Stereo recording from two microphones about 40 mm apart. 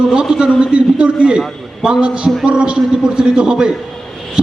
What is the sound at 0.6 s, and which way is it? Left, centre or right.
A man's voice, right.